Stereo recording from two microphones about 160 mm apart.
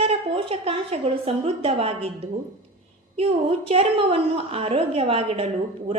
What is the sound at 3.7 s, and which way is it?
A woman's voice, 40° right (ahead or behind).